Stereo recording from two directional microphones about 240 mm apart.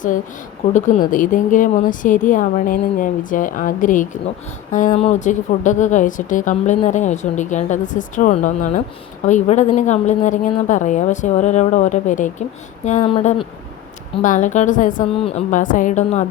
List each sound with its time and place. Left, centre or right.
0.7 s a woman's voice: left
14.2 s a woman's voice: left